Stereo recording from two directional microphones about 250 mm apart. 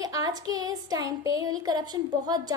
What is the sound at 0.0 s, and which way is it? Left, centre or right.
A woman's voice, centre.